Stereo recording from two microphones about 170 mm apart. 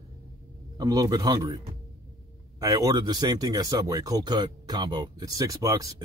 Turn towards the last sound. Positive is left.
turn(degrees=-20)  # may be behind; listen again after turning